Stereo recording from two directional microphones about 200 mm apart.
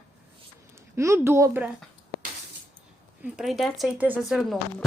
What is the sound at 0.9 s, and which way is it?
Speech, 15° right (ahead or behind).